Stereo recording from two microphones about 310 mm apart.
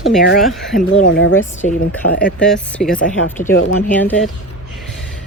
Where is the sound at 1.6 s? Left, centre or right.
Left.